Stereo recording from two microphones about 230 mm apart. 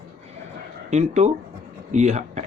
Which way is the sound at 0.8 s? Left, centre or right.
Right.